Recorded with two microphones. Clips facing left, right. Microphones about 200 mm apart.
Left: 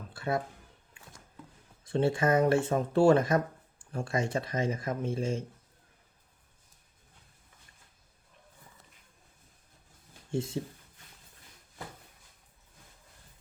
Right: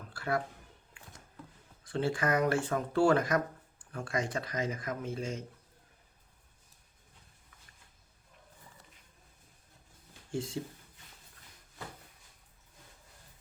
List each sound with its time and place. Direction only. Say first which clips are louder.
0.1 s a sound: left 2 dB; 25° left (ahead or behind)
1.8 s speech: left 5 dB; 25° left (ahead or behind)
10.3 s speech: left 3 dB; 25° left (ahead or behind)